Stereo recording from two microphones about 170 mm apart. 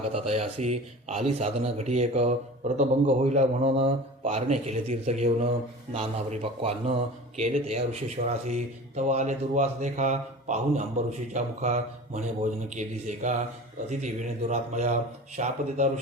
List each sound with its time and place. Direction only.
0.1 s a man's voice: 35° right (ahead or behind)